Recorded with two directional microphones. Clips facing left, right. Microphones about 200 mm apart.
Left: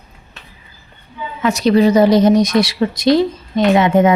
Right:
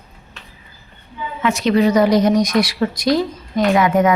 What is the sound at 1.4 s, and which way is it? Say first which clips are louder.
A woman's voice: left 3 dB; 35° left (ahead or behind).